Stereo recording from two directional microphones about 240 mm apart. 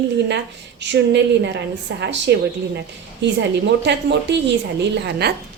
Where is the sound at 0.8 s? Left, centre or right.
Right.